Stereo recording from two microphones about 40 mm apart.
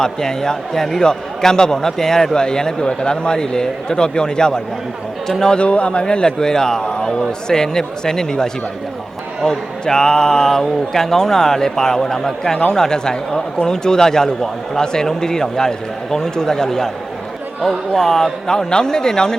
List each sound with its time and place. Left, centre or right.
0.0 s a man's voice: centre
5.5 s a man's voice: left
9.8 s a man's voice: centre